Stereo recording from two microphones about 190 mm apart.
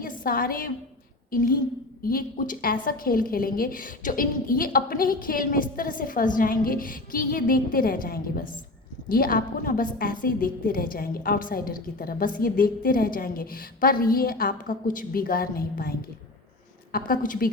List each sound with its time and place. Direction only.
0.0 s a woman's voice: 50° left (ahead or behind)